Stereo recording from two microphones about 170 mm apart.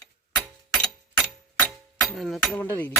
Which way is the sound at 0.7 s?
5° left (ahead or behind).